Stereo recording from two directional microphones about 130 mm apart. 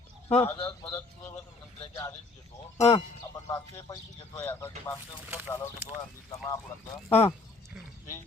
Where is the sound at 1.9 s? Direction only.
25° left (ahead or behind).